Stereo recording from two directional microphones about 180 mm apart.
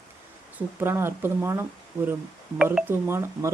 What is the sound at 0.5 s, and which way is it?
Speech, 15° right (ahead or behind).